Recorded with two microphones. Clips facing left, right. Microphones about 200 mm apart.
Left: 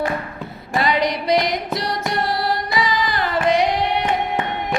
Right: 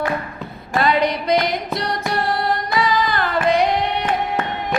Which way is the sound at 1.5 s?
Centre (ahead or behind).